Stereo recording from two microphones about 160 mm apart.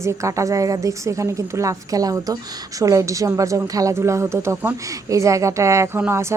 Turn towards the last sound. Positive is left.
turn(degrees=-15)  # may be behind; listen again after turning